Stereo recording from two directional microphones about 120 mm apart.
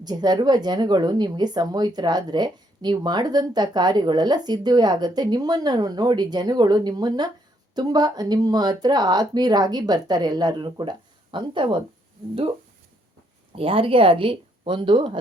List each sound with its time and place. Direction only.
0.0 s speech: 35° right (ahead or behind)
13.6 s speech: 50° right (ahead or behind)